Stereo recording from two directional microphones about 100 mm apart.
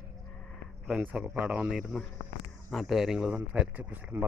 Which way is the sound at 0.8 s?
15° right (ahead or behind).